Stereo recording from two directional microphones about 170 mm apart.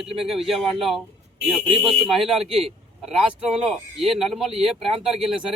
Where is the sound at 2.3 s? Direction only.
35° right (ahead or behind).